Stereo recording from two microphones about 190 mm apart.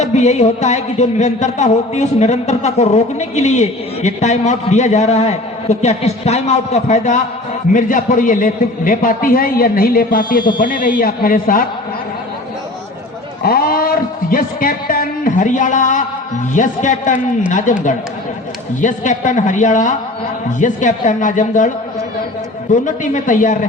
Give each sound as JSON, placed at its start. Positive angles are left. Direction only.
{"t": 0.0, "sound": "music", "side_deg": 35}
{"t": 7.7, "sound": "a man's voice", "side_deg": 45}
{"t": 13.4, "sound": "a man's voice", "side_deg": 50}
{"t": 16.6, "sound": "music", "side_deg": 40}
{"t": 17.7, "sound": "a man's voice", "side_deg": 40}
{"t": 18.8, "sound": "music", "side_deg": 40}
{"t": 22.7, "sound": "music", "side_deg": 40}